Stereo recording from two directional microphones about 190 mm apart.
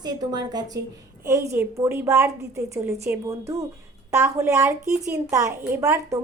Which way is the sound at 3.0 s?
15° right (ahead or behind).